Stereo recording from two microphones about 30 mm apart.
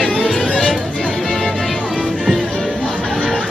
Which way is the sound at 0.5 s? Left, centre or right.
Left.